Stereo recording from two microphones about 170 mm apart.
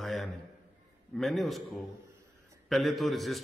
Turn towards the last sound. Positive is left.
turn(degrees=0)  # may be behind; listen again after turning